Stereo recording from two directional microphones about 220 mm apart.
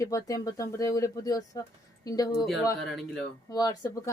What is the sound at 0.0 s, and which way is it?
Speech, 15° left (ahead or behind).